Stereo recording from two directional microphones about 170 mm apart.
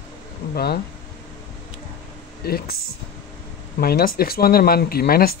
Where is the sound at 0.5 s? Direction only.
70° left (ahead or behind).